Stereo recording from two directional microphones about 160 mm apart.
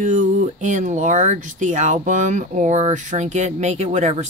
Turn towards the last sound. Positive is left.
turn(degrees=-45)  # may be behind; listen again after turning